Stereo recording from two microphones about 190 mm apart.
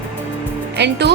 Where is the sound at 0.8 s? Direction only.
60° right (ahead or behind).